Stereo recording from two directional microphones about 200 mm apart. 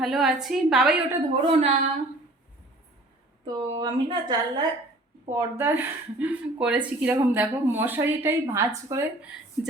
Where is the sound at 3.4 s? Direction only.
20° right (ahead or behind).